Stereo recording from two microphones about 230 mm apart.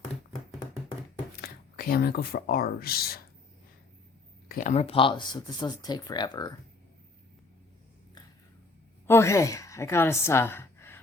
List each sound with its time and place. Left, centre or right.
1.4 s speech: left
4.4 s speech: left; by 6.5 s centre
9.0 s a woman's voice: centre